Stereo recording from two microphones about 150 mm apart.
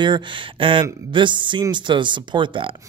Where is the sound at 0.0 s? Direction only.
30° right (ahead or behind).